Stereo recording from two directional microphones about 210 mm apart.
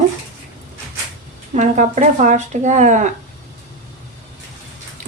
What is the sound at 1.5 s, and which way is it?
A woman's voice, 35° right (ahead or behind).